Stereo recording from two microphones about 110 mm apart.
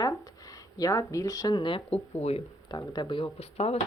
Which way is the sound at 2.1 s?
70° left (ahead or behind).